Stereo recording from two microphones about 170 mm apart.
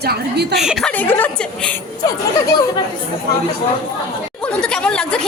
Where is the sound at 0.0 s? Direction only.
70° right (ahead or behind).